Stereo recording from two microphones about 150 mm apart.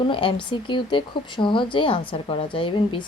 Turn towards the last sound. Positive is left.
turn(degrees=35)  # may be behind; listen again after turning